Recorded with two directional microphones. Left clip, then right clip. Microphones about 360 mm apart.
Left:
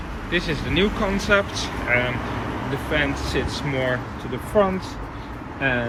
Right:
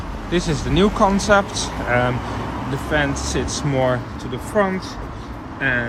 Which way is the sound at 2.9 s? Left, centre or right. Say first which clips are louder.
Right 3 dB; centre.